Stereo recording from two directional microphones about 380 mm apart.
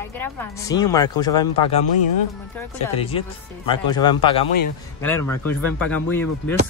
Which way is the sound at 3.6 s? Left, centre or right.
Centre.